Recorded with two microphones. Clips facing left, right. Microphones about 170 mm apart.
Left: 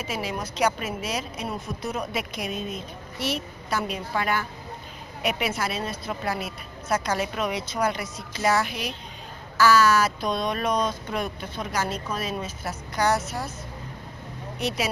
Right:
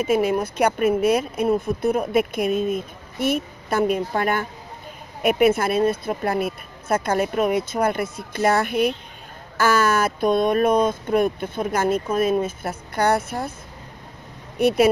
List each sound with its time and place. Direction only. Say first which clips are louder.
0.0 s speech: right 11 dB; 55° right (ahead or behind)
14.6 s speech: right 11 dB; 55° right (ahead or behind)